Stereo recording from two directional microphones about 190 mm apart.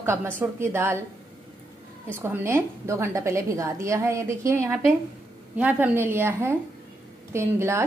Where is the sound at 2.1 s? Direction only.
10° right (ahead or behind).